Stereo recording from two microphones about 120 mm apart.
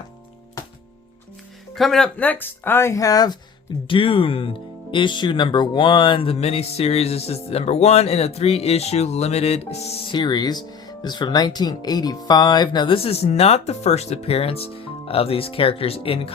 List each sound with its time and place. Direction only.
1.7 s speech: centre (ahead or behind)
2.1 s speech: 15° left (ahead or behind); by 3.3 s 30° left (ahead or behind)
3.8 s speech: 50° left (ahead or behind)
10.1 s speech: 40° left (ahead or behind)